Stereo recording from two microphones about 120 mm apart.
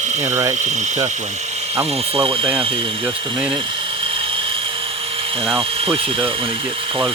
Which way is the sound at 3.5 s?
45° right (ahead or behind).